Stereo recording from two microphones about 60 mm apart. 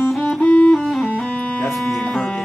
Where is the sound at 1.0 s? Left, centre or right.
Left.